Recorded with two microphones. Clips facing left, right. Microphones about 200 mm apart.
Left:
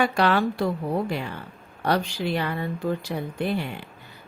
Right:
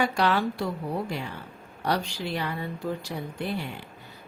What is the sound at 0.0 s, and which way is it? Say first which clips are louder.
Speech: left 3 dB; 60° left (ahead or behind).